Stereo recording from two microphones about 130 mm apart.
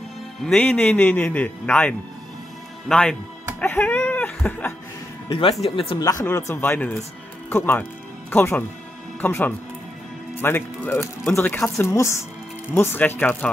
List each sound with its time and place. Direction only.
0.4 s speech: 5° left (ahead or behind)
5.3 s speech: 45° left (ahead or behind)
5.9 s a woman's voice: 25° left (ahead or behind)